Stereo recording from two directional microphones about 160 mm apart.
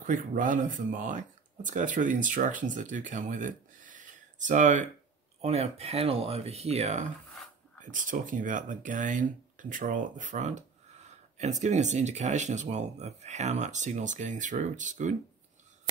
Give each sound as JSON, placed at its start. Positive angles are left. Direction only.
{"t": 0.0, "sound": "speech", "side_deg": -55}
{"t": 7.8, "sound": "speech", "side_deg": -55}